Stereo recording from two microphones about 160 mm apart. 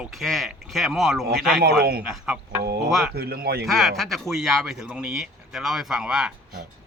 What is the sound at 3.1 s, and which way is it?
Speech, 75° right (ahead or behind).